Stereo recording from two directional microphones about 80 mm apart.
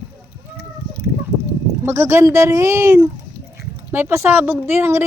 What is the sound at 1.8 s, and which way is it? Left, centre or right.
Speech, right.